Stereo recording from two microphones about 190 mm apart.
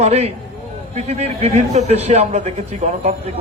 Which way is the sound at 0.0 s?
35° right (ahead or behind).